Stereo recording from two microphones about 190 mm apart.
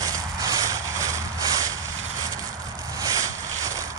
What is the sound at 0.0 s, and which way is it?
Vehicle, 20° right (ahead or behind).